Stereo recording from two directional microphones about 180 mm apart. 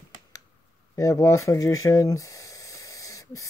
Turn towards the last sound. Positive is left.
turn(degrees=20)  # may be behind; listen again after turning